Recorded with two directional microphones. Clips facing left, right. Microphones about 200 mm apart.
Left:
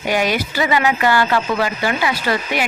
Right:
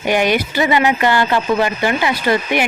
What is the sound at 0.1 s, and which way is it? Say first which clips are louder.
Speech: right 3 dB; 20° right (ahead or behind).